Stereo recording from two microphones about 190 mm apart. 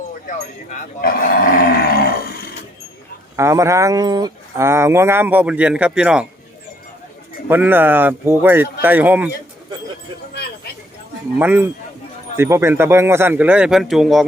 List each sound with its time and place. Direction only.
0.1 s speech: 45° left (ahead or behind)
3.3 s speech: 15° right (ahead or behind)
7.4 s speech: 10° right (ahead or behind)
11.3 s speech: 10° right (ahead or behind)